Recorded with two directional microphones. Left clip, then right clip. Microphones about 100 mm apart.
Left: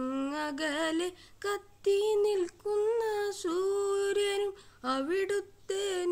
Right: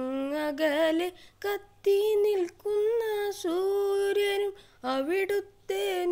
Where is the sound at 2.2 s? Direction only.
30° right (ahead or behind).